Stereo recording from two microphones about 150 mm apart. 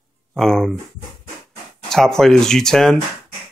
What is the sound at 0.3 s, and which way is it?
Speech, centre (ahead or behind).